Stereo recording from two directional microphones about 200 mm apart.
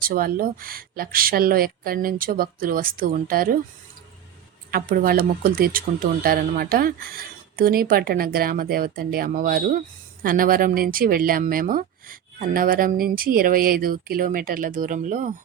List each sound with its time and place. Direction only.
0.0 s speech: 45° right (ahead or behind)
4.7 s speech: 45° right (ahead or behind)